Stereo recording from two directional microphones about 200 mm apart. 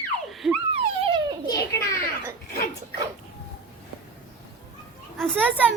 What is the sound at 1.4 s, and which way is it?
Children playing, 15° left (ahead or behind).